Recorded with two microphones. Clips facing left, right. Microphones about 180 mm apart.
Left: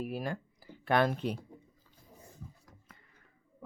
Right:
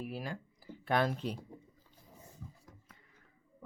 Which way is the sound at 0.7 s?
65° left (ahead or behind).